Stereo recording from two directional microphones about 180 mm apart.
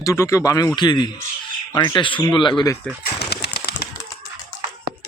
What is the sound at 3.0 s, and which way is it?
Bird, 65° left (ahead or behind).